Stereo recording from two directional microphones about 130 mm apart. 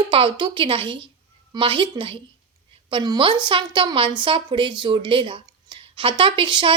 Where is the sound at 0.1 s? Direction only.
40° right (ahead or behind).